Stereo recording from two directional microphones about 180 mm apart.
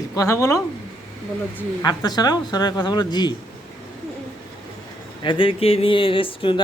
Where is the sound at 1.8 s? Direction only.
25° left (ahead or behind).